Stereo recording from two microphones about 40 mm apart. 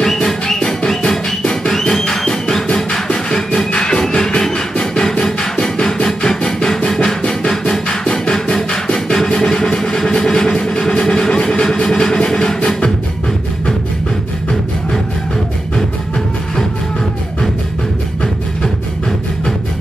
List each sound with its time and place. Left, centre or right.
0.0 s music: centre
5.2 s music: centre
5.8 s music: left
6.0 s a sound: centre
6.9 s music: centre